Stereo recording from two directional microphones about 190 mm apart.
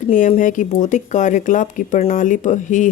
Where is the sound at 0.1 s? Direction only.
45° left (ahead or behind).